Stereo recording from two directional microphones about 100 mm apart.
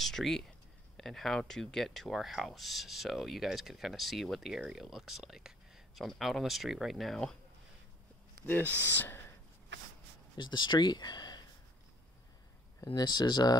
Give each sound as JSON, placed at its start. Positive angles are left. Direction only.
{"t": 0.0, "sound": "speech", "side_deg": 5}
{"t": 8.5, "sound": "speech", "side_deg": 20}
{"t": 10.3, "sound": "speech", "side_deg": 50}
{"t": 12.8, "sound": "speech", "side_deg": 45}